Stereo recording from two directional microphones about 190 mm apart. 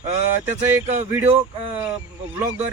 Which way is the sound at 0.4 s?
35° right (ahead or behind).